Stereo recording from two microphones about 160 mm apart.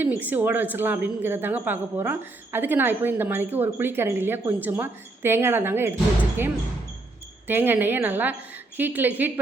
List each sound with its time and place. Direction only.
0.0 s a woman's voice: 10° right (ahead or behind)
7.4 s a woman's voice: 15° right (ahead or behind)